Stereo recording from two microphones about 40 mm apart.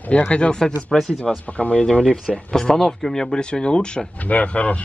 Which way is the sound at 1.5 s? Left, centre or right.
Left.